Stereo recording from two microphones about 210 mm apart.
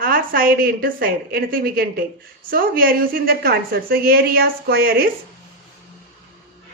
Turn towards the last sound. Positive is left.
turn(degrees=-45)  # may be behind; listen again after turning